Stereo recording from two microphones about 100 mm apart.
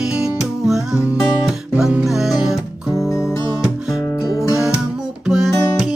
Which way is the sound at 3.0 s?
30° left (ahead or behind).